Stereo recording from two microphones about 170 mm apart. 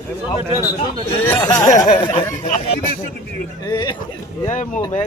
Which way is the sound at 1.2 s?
15° left (ahead or behind).